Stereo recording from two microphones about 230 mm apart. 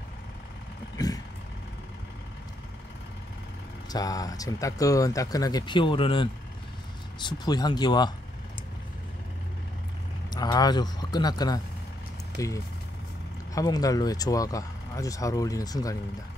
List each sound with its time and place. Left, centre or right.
0.9 s vehicle: centre
3.9 s speech: centre
10.3 s speech: centre
13.6 s speech: centre